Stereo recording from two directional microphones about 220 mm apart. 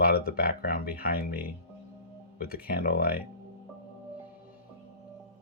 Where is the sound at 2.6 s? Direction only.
45° left (ahead or behind).